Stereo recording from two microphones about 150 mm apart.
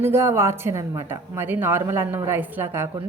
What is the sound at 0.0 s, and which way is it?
A woman's voice, 15° right (ahead or behind).